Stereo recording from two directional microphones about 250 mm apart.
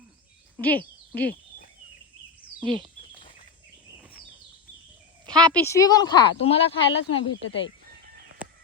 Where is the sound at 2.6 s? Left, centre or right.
Centre.